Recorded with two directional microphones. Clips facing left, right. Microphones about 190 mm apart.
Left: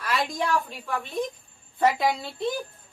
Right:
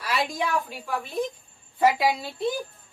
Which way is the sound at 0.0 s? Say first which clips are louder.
Even; 10° right (ahead or behind).